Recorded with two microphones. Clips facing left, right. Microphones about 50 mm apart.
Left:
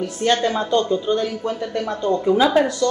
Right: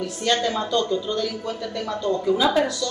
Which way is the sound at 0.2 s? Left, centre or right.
Left.